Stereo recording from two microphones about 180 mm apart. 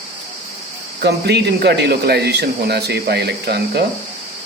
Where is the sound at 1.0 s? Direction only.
65° right (ahead or behind).